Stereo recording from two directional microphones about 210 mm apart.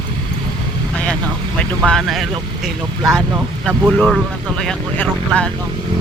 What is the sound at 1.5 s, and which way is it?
Speech, 5° left (ahead or behind).